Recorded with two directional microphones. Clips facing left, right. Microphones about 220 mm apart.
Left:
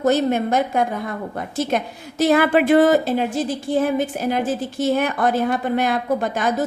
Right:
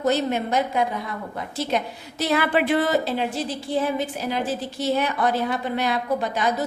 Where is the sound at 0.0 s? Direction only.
50° left (ahead or behind).